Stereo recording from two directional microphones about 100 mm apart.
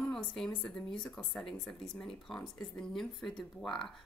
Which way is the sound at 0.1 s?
10° left (ahead or behind).